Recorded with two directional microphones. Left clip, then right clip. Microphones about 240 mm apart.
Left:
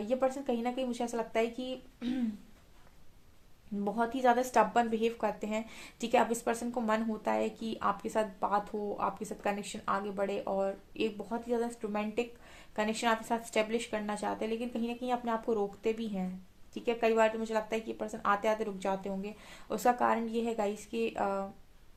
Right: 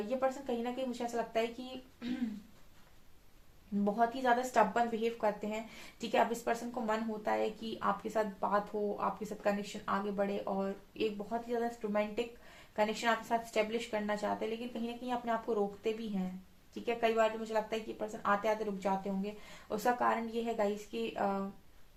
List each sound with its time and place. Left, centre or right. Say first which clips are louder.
0.2 s a woman's voice: left 3 dB; left
3.9 s a woman's voice: left 3 dB; left